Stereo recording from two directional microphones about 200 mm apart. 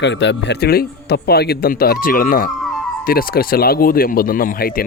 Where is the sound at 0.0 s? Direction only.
60° left (ahead or behind).